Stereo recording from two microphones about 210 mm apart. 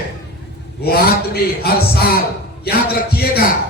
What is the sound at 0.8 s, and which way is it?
Music, 50° left (ahead or behind).